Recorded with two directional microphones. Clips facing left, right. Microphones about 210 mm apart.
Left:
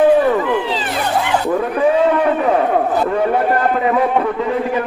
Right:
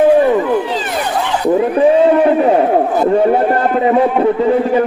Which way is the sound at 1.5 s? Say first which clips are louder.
Right 8 dB; 25° right (ahead or behind).